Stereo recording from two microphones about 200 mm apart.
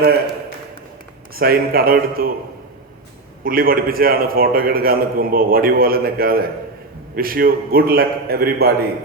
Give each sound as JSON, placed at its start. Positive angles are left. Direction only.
{"t": 1.3, "sound": "a man's voice", "side_deg": -50}
{"t": 3.4, "sound": "a man's voice", "side_deg": -45}